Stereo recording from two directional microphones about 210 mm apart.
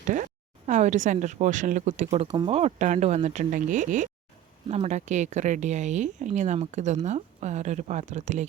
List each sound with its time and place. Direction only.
0.0 s speech: 35° right (ahead or behind)